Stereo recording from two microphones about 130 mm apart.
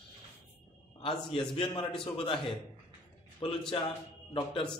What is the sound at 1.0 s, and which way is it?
A man's voice, 40° left (ahead or behind).